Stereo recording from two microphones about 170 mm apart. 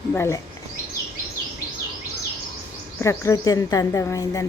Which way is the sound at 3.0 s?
20° left (ahead or behind).